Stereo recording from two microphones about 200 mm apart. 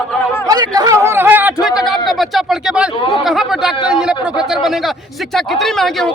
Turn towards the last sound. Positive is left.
turn(degrees=0)  # may be behind; listen again after turning